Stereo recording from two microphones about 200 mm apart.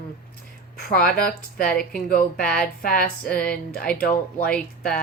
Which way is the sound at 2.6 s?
45° left (ahead or behind).